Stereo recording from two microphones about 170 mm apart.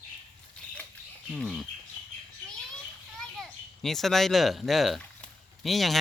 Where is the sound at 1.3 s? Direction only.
Centre (ahead or behind).